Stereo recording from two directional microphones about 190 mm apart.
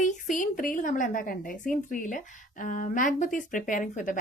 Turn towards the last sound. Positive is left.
turn(degrees=45)  # may be behind; listen again after turning